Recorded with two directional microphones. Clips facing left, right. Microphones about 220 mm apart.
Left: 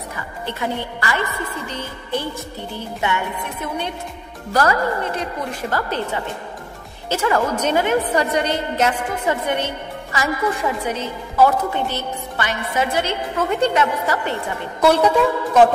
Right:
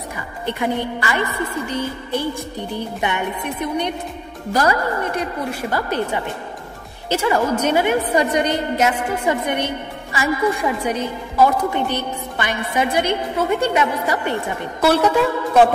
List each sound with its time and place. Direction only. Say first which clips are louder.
0.5 s a woman's voice: right 4 dB; 15° right (ahead or behind)